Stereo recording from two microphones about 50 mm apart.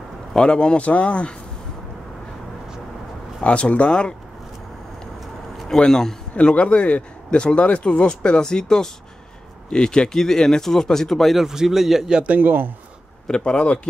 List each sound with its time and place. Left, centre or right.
0.3 s speech: centre
3.4 s speech: left
5.7 s speech: centre
6.3 s speech: left; by 12.1 s centre
12.1 s a man's voice: right
12.4 s speech: right
13.3 s speech: centre